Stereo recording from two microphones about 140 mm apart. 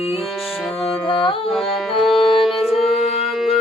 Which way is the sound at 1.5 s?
Centre (ahead or behind).